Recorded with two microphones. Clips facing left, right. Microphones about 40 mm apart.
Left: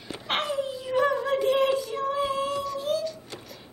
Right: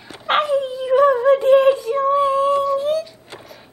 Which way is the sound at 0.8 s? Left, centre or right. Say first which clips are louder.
Right 11 dB; right.